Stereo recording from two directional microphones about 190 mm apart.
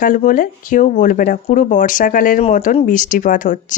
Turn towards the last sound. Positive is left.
turn(degrees=45)  # may be behind; listen again after turning